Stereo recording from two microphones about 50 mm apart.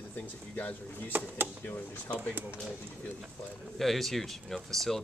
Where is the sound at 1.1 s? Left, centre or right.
Right.